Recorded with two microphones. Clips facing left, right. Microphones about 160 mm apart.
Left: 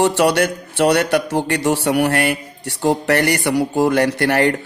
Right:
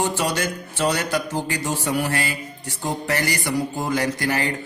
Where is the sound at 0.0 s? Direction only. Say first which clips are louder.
Left 8 dB; 70° left (ahead or behind).